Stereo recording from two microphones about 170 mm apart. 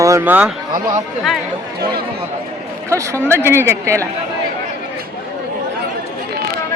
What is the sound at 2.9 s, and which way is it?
Speech, 15° right (ahead or behind).